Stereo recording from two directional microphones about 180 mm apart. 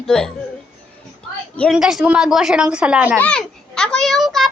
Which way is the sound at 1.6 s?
Centre (ahead or behind).